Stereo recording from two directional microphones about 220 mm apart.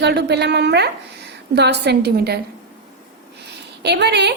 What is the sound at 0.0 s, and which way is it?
A woman's voice, 50° right (ahead or behind).